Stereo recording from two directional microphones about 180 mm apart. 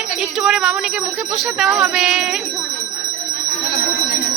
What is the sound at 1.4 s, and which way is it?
Speech, centre (ahead or behind).